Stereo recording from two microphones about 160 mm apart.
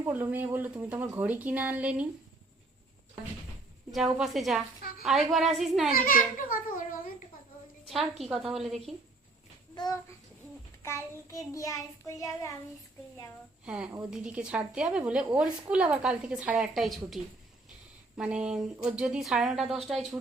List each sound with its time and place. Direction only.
0.0 s speech: 10° right (ahead or behind)
3.9 s a woman's voice: centre (ahead or behind)
4.8 s a woman's voice: 70° left (ahead or behind)
5.0 s a woman's voice: centre (ahead or behind)
5.9 s a child's voice: 60° left (ahead or behind)
7.9 s a woman's voice: centre (ahead or behind)
9.7 s child singing: 25° left (ahead or behind)
13.7 s a woman's voice: 5° right (ahead or behind)
18.2 s a woman's voice: 5° right (ahead or behind)